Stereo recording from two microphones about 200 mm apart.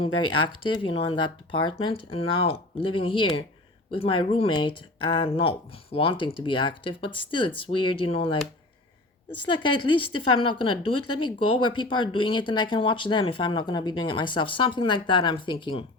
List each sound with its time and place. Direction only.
0.4 s speech: 25° left (ahead or behind)
10.9 s speech: 90° left
11.3 s speech: 25° left (ahead or behind)